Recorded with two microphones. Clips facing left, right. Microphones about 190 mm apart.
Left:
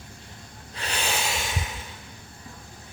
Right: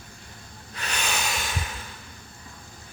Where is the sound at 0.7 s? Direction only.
30° left (ahead or behind).